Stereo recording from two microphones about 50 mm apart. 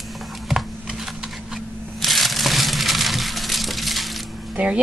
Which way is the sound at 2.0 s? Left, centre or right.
Centre.